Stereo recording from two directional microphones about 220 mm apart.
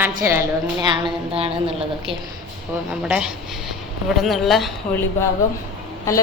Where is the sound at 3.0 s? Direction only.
5° right (ahead or behind).